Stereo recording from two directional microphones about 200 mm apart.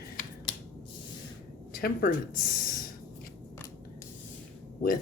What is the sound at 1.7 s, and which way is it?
A woman's voice, 50° left (ahead or behind).